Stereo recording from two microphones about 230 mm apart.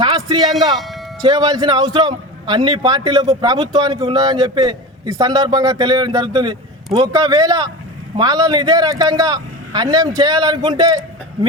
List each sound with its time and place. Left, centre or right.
0.0 s music: centre
1.2 s a man's voice: centre